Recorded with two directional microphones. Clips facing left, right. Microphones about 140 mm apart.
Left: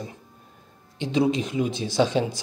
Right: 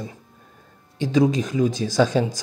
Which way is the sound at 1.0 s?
40° right (ahead or behind).